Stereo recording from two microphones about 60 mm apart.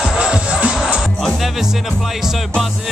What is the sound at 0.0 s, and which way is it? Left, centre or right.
Music, centre.